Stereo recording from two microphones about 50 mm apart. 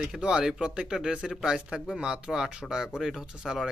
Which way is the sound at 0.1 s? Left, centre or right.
Centre.